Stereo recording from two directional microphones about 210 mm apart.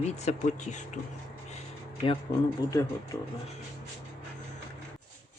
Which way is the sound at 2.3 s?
20° left (ahead or behind).